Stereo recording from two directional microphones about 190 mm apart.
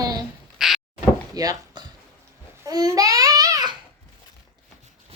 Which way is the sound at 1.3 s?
20° right (ahead or behind).